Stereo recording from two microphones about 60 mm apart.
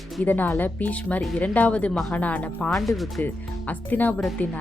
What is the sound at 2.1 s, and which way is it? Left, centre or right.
Speech, left.